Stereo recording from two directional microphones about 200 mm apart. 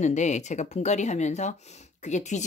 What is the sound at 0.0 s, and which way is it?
Speech, 35° left (ahead or behind).